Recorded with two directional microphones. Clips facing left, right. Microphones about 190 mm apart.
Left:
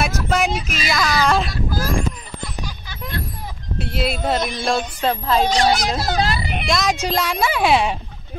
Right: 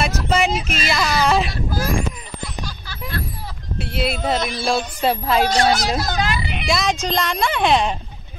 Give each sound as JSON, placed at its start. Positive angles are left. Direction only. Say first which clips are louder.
{"t": 0.0, "sound": "speech", "louder": "right 1 dB", "side_deg": 0}
{"t": 3.8, "sound": "speech", "louder": "even", "side_deg": 0}
{"t": 4.6, "sound": "music", "louder": "right 2 dB", "side_deg": -5}
{"t": 5.7, "sound": "speech", "louder": "even", "side_deg": 25}
{"t": 6.7, "sound": "speech", "louder": "even", "side_deg": 0}